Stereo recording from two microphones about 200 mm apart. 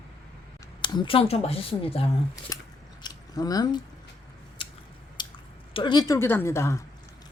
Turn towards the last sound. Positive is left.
turn(degrees=15)  # may be behind; listen again after turning